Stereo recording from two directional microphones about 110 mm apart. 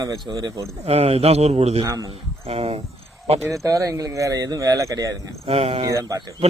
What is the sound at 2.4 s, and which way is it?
Speech, 65° right (ahead or behind).